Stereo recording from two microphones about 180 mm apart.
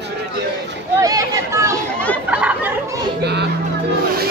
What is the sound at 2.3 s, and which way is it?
Chatter, 5° right (ahead or behind).